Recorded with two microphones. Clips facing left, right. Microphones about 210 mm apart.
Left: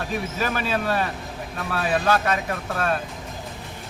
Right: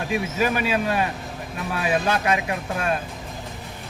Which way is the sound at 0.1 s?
15° right (ahead or behind).